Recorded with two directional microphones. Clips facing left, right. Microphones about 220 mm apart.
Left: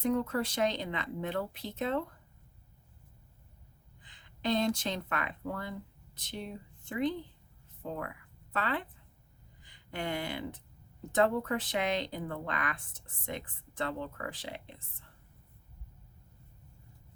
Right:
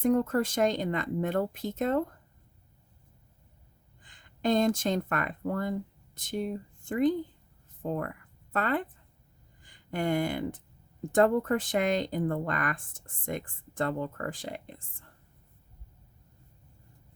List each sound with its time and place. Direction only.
0.0 s speech: 50° right (ahead or behind)
4.0 s speech: 45° right (ahead or behind)